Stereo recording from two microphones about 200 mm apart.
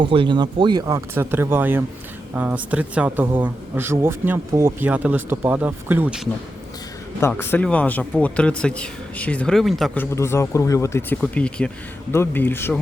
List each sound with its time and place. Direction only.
0.0 s speech: 25° right (ahead or behind); by 6.2 s 5° right (ahead or behind)
7.2 s speech: 10° left (ahead or behind)